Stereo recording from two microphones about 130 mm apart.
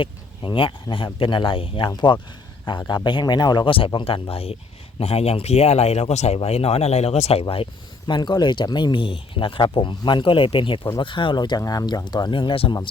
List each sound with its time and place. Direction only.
0.0 s speech: 40° left (ahead or behind)
7.5 s speech: 40° left (ahead or behind)